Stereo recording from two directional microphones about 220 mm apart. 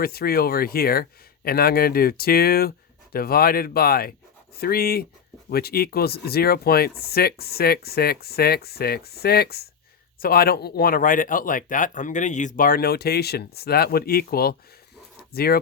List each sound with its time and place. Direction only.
0.0 s speech: 45° left (ahead or behind)